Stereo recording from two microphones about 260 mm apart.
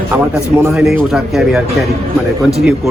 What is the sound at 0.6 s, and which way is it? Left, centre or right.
Speech, centre.